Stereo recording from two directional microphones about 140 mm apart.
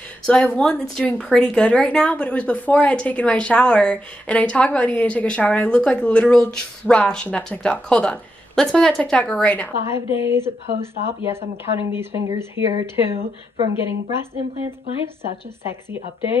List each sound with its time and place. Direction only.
0.3 s a woman's voice: 10° left (ahead or behind)
9.8 s speech: 20° right (ahead or behind)